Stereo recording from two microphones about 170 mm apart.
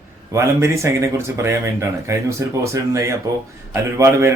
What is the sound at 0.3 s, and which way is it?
Speech, 15° right (ahead or behind).